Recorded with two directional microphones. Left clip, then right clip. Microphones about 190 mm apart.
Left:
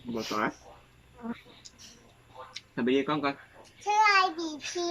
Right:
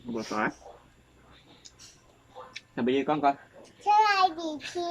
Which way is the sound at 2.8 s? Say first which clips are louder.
Right 1 dB; 5° right (ahead or behind).